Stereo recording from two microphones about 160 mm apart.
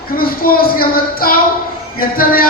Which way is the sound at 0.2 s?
65° left (ahead or behind).